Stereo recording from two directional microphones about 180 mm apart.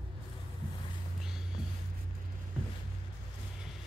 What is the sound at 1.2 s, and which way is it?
Music, 5° right (ahead or behind).